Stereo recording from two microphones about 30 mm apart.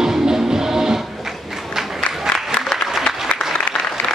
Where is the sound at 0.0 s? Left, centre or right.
Centre.